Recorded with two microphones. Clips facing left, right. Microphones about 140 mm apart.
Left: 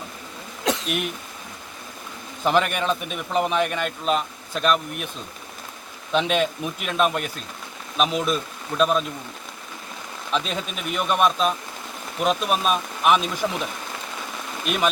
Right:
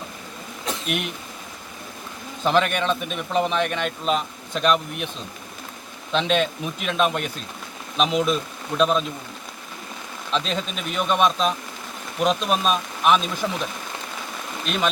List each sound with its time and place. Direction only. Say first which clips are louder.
0.7 s throat clearing: left 6 dB; 85° left
2.4 s a man's voice: right 1 dB; 10° left (ahead or behind)
6.1 s a man's voice: even; 10° left (ahead or behind)
10.3 s speech: right 1 dB; 10° left (ahead or behind)
14.6 s speech: left 1 dB; 10° left (ahead or behind)